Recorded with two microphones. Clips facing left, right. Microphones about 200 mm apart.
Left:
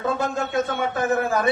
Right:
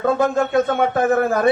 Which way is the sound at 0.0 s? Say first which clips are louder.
Right 7 dB; 55° right (ahead or behind).